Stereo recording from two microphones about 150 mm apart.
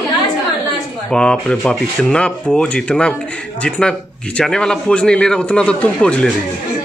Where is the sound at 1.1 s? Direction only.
5° left (ahead or behind).